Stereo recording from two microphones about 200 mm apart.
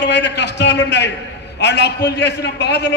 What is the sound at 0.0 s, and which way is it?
A man's voice, 60° left (ahead or behind).